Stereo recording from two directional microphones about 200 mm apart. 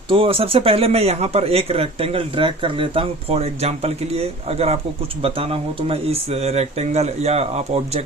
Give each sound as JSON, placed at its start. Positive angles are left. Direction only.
{"t": 0.1, "sound": "speech", "side_deg": -25}